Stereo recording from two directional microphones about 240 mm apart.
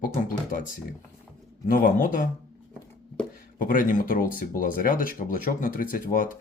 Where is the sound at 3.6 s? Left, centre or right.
Left.